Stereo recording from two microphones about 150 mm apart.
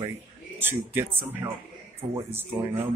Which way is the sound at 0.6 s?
15° right (ahead or behind).